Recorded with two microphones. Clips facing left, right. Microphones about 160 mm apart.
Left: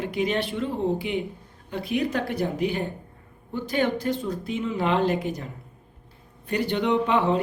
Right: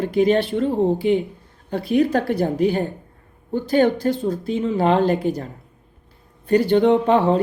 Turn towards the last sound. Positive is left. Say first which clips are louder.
# right 6 dB
turn(degrees=-40)  # may be behind; listen again after turning